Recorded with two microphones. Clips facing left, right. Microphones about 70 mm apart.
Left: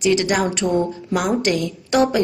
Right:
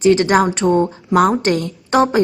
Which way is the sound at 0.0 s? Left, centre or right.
Right.